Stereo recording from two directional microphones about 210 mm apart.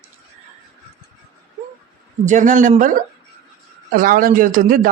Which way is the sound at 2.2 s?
35° right (ahead or behind).